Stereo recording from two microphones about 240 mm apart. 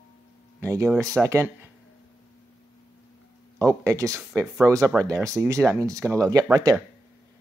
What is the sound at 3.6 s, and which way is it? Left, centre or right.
Speech, centre.